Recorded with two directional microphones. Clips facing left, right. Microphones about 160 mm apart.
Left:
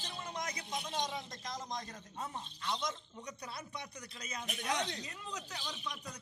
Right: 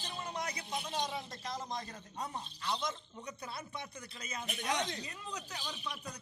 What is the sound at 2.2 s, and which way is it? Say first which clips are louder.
Speech: right 1 dB; 35° right (ahead or behind).